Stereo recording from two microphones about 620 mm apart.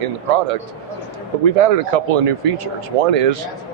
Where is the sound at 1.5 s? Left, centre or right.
Right.